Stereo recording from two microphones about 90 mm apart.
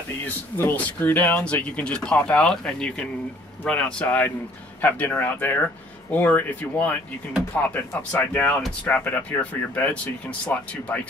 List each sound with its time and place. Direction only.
0.6 s speech: 20° left (ahead or behind)